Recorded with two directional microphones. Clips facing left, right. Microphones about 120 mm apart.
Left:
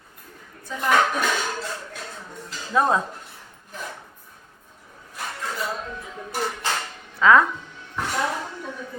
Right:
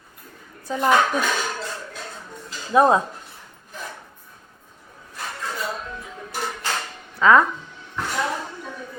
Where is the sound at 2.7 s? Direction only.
20° right (ahead or behind).